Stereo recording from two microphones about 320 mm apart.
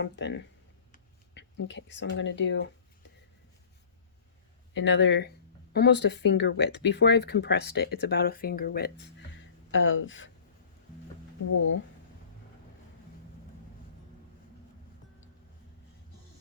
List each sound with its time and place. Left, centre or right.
0.0 s speech: left
4.7 s speech: left